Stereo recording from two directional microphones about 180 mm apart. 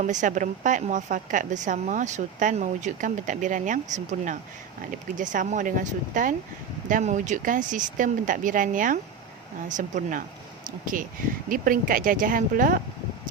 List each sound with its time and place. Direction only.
0.0 s a woman's voice: 45° right (ahead or behind)